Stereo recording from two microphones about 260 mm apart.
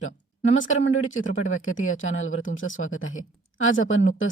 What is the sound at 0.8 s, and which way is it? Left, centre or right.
Speech, left.